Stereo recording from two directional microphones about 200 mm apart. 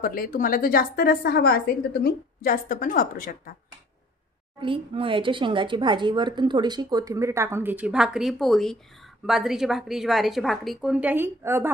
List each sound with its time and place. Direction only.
0.0 s a woman's voice: 45° left (ahead or behind)
4.6 s speech: 25° right (ahead or behind)